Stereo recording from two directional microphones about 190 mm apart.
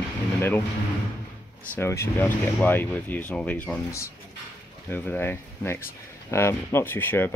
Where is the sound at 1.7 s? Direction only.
15° left (ahead or behind).